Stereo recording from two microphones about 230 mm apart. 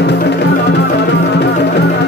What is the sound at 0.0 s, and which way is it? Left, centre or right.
Music, left.